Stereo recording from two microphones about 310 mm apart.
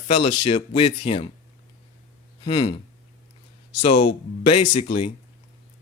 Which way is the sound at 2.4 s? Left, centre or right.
Centre.